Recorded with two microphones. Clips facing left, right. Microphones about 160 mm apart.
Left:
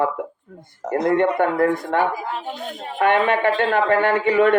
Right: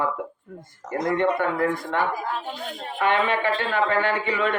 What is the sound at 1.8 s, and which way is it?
Speech, 25° left (ahead or behind).